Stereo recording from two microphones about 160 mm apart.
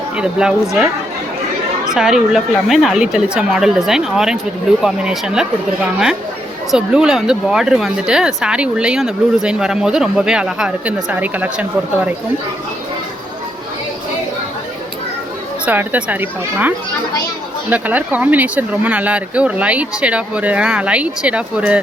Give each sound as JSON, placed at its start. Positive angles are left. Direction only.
{"t": 0.2, "sound": "speech", "side_deg": -5}
{"t": 1.9, "sound": "speech", "side_deg": -5}
{"t": 6.7, "sound": "speech", "side_deg": -5}
{"t": 15.6, "sound": "speech", "side_deg": -10}